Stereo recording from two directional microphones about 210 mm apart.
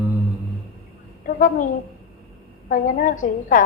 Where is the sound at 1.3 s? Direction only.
40° left (ahead or behind).